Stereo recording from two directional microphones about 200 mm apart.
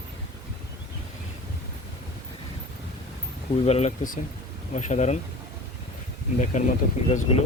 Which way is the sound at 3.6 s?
30° left (ahead or behind).